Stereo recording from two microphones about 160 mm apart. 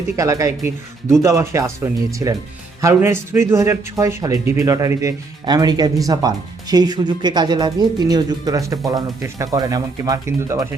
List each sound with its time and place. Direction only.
0.2 s a man's voice: 20° right (ahead or behind)